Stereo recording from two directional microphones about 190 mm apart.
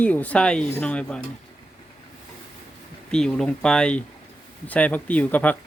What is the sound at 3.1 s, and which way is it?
Speech, 5° left (ahead or behind).